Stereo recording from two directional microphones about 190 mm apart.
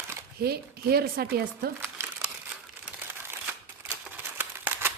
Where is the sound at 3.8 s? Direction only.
10° right (ahead or behind).